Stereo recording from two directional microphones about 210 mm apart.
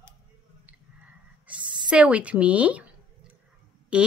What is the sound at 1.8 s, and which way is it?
Speech, 5° right (ahead or behind).